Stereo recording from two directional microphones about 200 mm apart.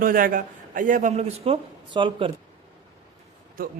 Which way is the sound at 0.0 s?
45° right (ahead or behind).